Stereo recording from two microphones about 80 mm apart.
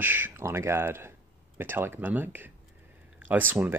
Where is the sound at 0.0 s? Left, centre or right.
Right.